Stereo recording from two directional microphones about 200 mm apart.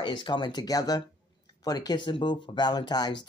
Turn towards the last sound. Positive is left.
turn(degrees=20)  # may be behind; listen again after turning